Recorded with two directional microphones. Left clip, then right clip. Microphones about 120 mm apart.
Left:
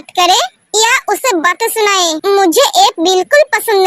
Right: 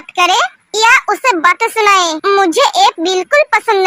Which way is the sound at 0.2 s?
35° left (ahead or behind).